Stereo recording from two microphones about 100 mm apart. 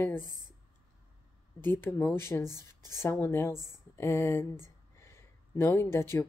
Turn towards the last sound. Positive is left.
turn(degrees=25)  # may be behind; listen again after turning